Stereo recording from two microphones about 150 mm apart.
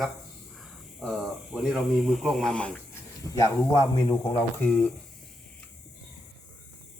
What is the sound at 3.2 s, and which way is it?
Speech, 20° left (ahead or behind).